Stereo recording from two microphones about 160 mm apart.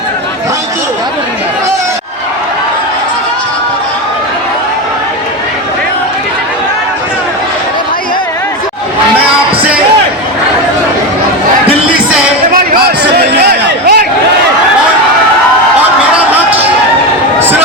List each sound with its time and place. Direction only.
13.1 s chatter: 75° right (ahead or behind)